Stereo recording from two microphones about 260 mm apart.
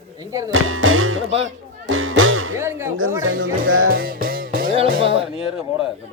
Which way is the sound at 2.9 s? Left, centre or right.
Right.